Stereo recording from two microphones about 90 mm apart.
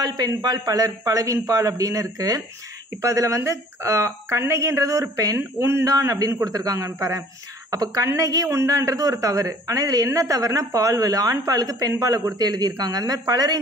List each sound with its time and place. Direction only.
0.0 s a man's voice: 50° right (ahead or behind)